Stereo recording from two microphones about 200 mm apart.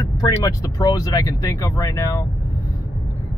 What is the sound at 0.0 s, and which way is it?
Speech, 20° left (ahead or behind).